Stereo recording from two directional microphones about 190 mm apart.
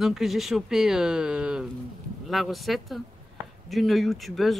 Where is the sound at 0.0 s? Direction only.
Centre (ahead or behind).